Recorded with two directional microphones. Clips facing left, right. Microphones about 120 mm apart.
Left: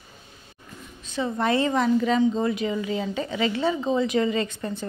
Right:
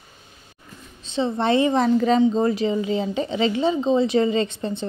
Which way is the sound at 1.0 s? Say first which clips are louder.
Right 3 dB; 25° right (ahead or behind).